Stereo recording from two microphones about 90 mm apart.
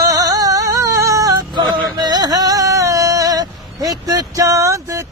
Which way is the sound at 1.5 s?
55° right (ahead or behind).